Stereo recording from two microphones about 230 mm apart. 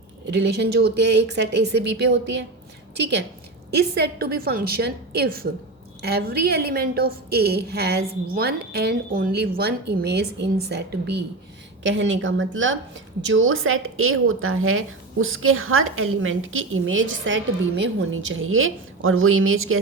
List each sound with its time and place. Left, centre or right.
0.3 s a woman's voice: right